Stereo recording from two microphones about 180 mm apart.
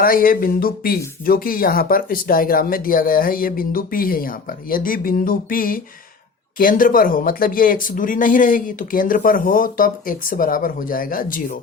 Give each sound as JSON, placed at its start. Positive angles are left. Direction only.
{"t": 0.0, "sound": "speech", "side_deg": 55}